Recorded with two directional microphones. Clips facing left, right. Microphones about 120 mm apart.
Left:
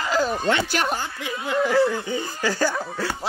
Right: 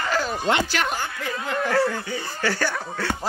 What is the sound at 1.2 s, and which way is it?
Speech, 15° left (ahead or behind).